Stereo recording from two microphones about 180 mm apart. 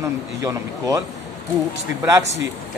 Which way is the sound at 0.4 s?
15° right (ahead or behind).